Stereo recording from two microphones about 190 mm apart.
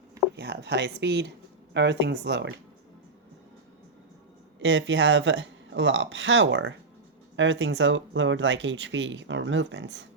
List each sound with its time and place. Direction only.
0.3 s speech: 65° right (ahead or behind)
4.6 s speech: 75° right (ahead or behind)